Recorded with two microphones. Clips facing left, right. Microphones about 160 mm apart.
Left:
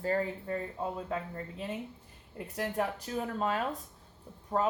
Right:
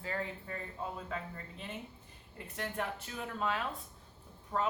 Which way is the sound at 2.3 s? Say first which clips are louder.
Left 6 dB; 40° left (ahead or behind).